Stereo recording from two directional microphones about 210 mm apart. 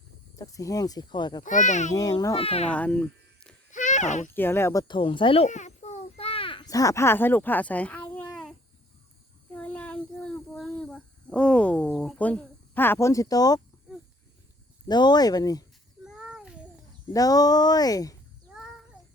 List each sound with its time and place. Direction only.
0.3 s speech: 15° left (ahead or behind)
1.5 s a child's voice: 35° left (ahead or behind)
1.9 s speech: 15° left (ahead or behind)
2.6 s speech: 5° left (ahead or behind)
3.7 s a sound: 35° left (ahead or behind)
4.3 s speech: 10° left (ahead or behind)
9.5 s a sound: 5° left (ahead or behind)
14.8 s speech: 20° left (ahead or behind)
16.0 s a sound: 5° right (ahead or behind)
17.1 s speech: 15° left (ahead or behind)